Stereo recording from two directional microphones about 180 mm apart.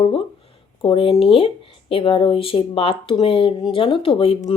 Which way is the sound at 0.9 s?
30° left (ahead or behind).